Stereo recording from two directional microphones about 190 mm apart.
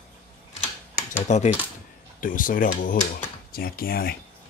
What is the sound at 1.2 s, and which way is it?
Speech, 40° left (ahead or behind).